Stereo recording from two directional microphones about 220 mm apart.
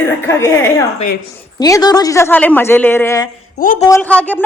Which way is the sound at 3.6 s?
35° left (ahead or behind).